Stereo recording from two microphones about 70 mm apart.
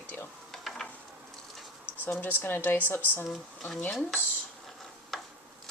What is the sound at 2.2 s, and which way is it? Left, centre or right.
Speech, left.